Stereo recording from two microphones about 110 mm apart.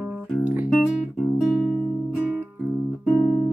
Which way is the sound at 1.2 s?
5° right (ahead or behind).